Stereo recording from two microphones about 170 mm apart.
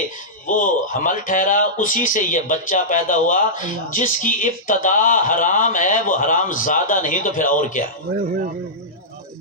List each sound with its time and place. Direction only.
0.4 s speech: 50° left (ahead or behind)